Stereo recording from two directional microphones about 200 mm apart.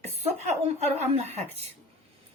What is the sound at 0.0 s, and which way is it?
Chuckle, 30° right (ahead or behind).